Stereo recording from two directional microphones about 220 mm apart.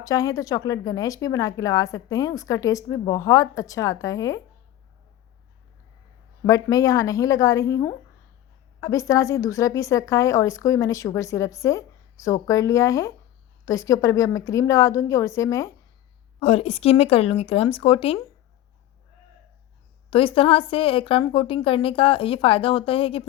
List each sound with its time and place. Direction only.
0.0 s a woman's voice: 15° left (ahead or behind)
6.4 s a woman's voice: 15° left (ahead or behind)
16.4 s a woman's voice: 25° left (ahead or behind)
20.1 s a woman's voice: 25° left (ahead or behind)